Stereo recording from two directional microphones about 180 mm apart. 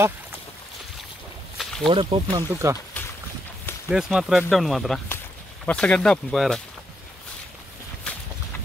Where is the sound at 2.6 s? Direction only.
15° right (ahead or behind).